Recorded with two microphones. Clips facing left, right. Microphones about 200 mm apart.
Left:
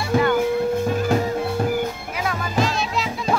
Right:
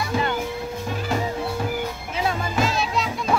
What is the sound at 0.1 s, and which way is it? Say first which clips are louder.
Music: left 6 dB; 55° left (ahead or behind).